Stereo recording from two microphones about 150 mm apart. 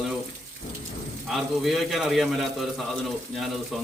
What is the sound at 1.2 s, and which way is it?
A man's voice, centre (ahead or behind).